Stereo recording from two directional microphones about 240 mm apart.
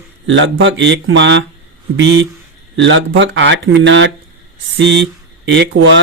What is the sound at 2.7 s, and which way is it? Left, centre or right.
Speech, right.